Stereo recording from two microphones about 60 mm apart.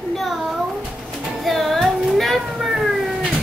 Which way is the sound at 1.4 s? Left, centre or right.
Centre.